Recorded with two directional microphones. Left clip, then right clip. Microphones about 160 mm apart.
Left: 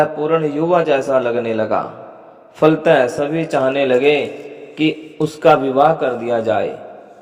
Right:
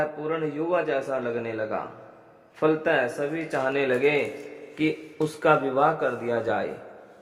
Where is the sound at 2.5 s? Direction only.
40° left (ahead or behind).